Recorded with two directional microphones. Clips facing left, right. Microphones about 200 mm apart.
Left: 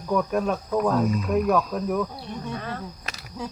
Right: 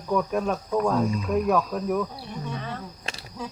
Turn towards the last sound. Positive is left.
turn(degrees=-30)  # may be behind; listen again after turning